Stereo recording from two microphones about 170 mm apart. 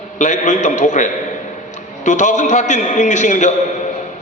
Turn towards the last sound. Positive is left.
turn(degrees=45)  # may be behind; listen again after turning